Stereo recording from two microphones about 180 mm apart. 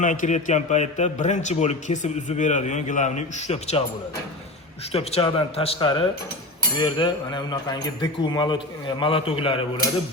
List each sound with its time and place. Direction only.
0.0 s a man's voice: 45° left (ahead or behind)
4.9 s a man's voice: 35° left (ahead or behind)